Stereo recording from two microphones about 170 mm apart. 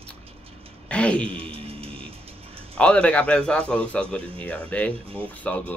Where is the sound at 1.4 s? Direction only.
35° right (ahead or behind).